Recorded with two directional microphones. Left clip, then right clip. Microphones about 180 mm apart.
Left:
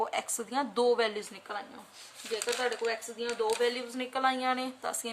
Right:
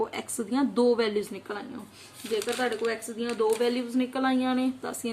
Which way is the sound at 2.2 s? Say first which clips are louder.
Right 3 dB; centre (ahead or behind).